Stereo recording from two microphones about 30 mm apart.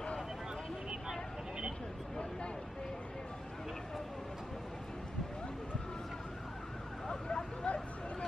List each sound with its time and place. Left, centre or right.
7.1 s vehicle: left